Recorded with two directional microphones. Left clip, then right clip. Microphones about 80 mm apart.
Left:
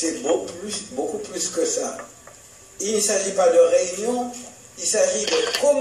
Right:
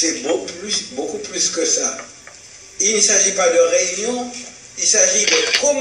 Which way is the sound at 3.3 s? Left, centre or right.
Left.